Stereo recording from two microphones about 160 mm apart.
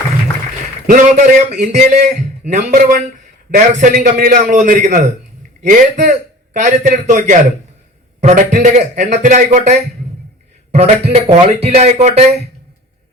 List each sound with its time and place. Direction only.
0.9 s a man's voice: 50° right (ahead or behind)